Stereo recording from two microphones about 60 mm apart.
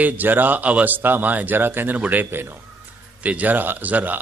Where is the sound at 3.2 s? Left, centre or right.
Right.